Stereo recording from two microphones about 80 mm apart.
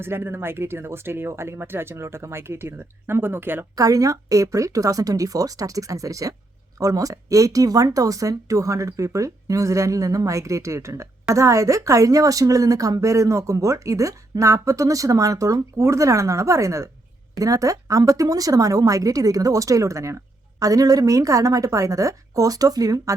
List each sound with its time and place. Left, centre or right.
0.0 s speech: right
3.8 s a woman's voice: right